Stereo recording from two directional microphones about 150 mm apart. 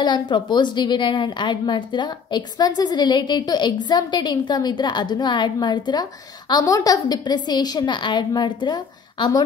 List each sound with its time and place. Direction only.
0.0 s a woman's voice: 30° left (ahead or behind)